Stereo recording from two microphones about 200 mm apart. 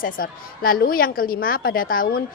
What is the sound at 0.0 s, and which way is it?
A woman's voice, 45° left (ahead or behind).